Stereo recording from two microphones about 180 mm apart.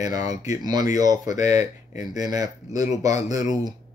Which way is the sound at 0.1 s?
20° right (ahead or behind).